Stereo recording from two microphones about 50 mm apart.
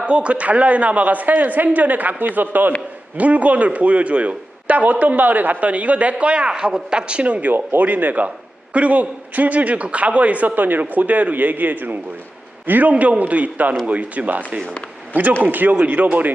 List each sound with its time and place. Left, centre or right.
0.0 s a man's voice: right